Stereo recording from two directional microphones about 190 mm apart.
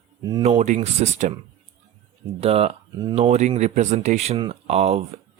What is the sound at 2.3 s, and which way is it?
Speech, 30° right (ahead or behind).